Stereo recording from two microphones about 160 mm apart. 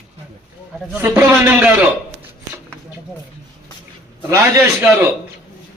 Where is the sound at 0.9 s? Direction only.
15° right (ahead or behind).